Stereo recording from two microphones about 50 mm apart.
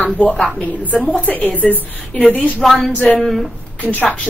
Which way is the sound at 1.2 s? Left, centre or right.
Left.